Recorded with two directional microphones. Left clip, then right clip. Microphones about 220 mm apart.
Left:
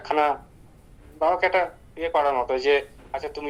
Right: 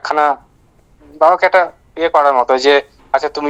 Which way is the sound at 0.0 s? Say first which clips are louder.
Right 8 dB; 55° right (ahead or behind).